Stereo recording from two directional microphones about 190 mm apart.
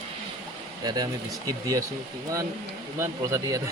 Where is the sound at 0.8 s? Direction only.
20° right (ahead or behind).